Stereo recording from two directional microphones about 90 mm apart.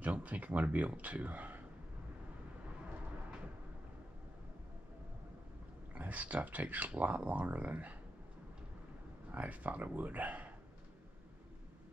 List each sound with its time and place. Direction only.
0.0 s speech: 15° right (ahead or behind)
5.9 s speech: 15° right (ahead or behind)
9.3 s speech: 15° right (ahead or behind)